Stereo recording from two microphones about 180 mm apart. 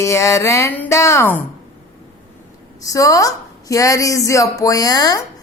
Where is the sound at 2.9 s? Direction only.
20° left (ahead or behind).